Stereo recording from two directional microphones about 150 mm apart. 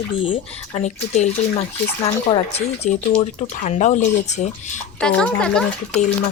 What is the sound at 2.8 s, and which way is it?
Speech, 55° left (ahead or behind).